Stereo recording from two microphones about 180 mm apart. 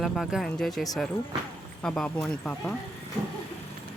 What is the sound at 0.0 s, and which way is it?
Speech, centre (ahead or behind).